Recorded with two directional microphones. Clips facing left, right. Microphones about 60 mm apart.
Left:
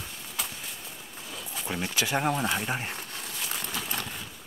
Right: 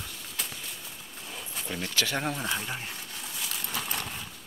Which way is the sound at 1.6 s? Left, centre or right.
Left.